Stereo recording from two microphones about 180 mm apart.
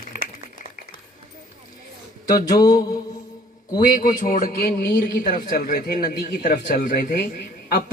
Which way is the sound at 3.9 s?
45° left (ahead or behind).